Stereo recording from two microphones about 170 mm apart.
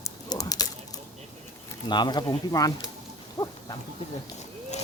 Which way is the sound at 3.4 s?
20° left (ahead or behind).